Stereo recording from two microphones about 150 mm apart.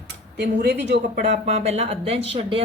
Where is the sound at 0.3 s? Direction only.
90° right.